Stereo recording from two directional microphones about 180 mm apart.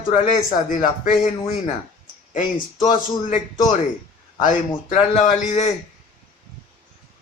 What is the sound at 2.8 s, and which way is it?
A man's voice, 45° left (ahead or behind).